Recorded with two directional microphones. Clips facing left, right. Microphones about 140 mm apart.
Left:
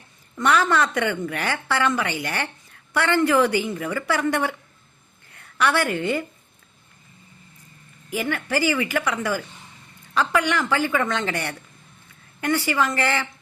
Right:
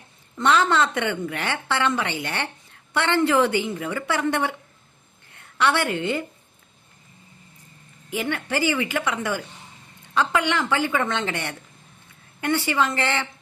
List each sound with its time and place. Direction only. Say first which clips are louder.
0.3 s a woman's voice: even; 25° right (ahead or behind)
8.1 s a woman's voice: left 1 dB; 25° right (ahead or behind)